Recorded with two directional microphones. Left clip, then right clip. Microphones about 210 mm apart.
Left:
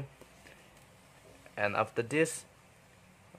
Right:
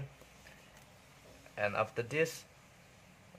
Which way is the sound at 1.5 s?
20° left (ahead or behind).